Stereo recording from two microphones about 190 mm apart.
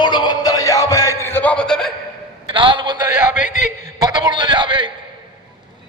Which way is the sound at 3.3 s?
45° left (ahead or behind).